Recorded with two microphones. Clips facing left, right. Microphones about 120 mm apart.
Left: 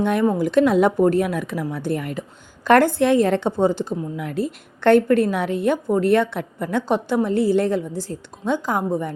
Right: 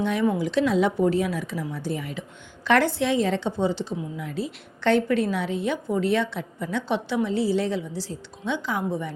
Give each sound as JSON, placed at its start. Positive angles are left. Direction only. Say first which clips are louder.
{"t": 0.0, "sound": "speech", "louder": "left 4 dB", "side_deg": 50}